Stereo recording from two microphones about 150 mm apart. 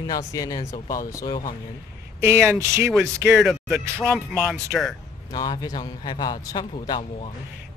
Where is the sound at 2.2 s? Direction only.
15° right (ahead or behind).